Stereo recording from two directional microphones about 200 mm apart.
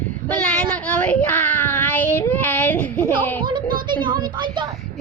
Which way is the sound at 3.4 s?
25° right (ahead or behind).